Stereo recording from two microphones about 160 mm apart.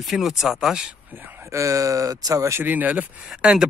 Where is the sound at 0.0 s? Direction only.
Centre (ahead or behind).